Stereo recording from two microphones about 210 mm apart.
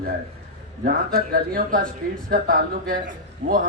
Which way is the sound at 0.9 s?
45° right (ahead or behind).